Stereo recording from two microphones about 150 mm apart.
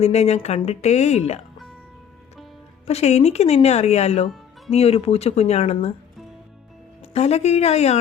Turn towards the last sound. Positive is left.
turn(degrees=45)  # may be behind; listen again after turning